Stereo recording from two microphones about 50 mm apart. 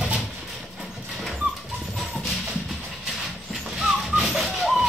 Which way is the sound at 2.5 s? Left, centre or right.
Centre.